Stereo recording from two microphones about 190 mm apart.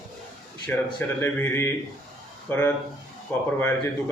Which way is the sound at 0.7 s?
10° left (ahead or behind).